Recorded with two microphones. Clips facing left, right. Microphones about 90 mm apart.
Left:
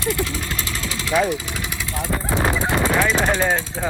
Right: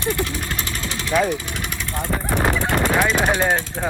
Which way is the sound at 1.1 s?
Centre (ahead or behind).